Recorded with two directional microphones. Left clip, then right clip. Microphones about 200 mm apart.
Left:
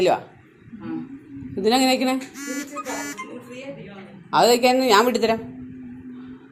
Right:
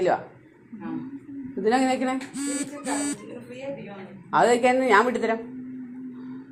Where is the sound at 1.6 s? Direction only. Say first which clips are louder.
Left 4 dB; 20° left (ahead or behind).